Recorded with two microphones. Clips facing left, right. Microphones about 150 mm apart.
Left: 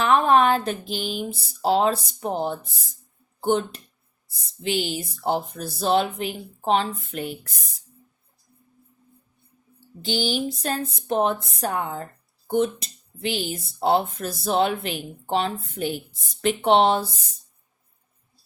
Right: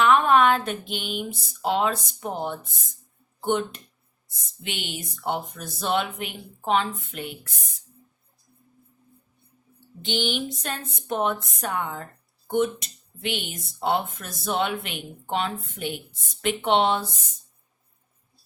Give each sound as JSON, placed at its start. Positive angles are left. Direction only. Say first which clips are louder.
{"t": 0.0, "sound": "speech", "louder": "even", "side_deg": 35}
{"t": 10.0, "sound": "speech", "louder": "left 2 dB", "side_deg": 35}